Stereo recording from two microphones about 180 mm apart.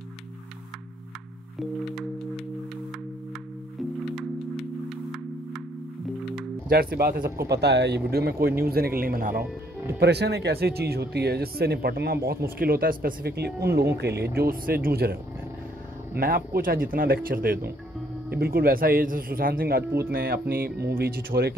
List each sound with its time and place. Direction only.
1.6 s music: centre (ahead or behind)
4.1 s music: centre (ahead or behind)
6.7 s speech: 55° right (ahead or behind)
9.9 s speech: 70° right (ahead or behind)
16.2 s speech: 55° right (ahead or behind)